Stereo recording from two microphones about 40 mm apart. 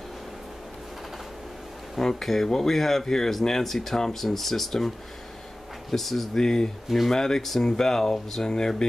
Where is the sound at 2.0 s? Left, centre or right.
Centre.